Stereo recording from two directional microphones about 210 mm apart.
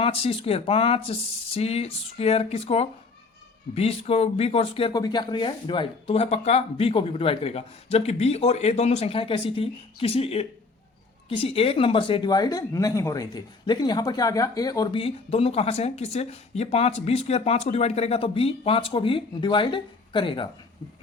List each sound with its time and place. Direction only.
0.0 s speech: 25° left (ahead or behind)